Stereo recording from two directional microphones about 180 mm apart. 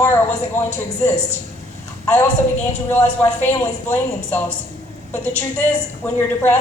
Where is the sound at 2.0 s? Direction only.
15° left (ahead or behind).